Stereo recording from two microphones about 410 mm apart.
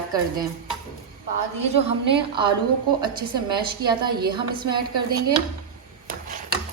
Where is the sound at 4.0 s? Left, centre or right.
Right.